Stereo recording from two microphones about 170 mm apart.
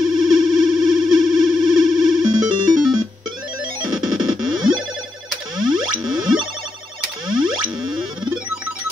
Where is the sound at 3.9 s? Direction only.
Centre (ahead or behind).